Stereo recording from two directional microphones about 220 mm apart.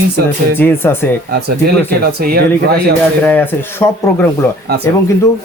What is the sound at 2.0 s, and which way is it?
Speech, 45° right (ahead or behind).